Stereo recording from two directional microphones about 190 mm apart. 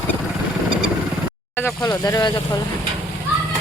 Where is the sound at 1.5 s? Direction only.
15° left (ahead or behind).